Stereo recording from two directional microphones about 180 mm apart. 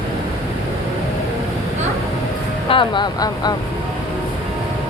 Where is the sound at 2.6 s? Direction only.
25° left (ahead or behind).